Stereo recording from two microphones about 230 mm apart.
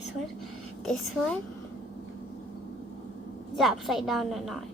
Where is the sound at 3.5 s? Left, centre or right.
Centre.